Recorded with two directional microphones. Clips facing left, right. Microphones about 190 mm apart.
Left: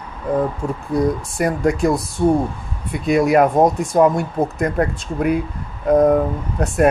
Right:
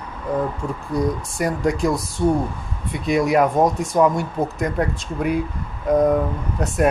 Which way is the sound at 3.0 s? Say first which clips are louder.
Left 3 dB; 55° left (ahead or behind).